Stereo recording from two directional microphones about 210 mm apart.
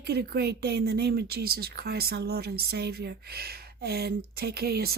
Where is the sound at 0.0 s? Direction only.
50° right (ahead or behind).